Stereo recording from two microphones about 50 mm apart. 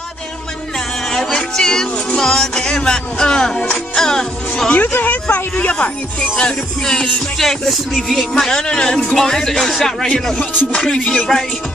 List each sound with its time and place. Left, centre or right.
1.1 s music: centre
4.9 s speech: left
6.3 s music: centre
7.3 s music: centre